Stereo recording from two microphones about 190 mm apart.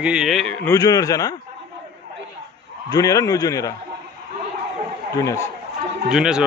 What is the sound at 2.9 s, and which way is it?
Speech, 15° left (ahead or behind).